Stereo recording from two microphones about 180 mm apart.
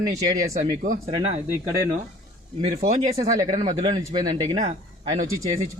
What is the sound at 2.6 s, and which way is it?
Speech, 40° right (ahead or behind).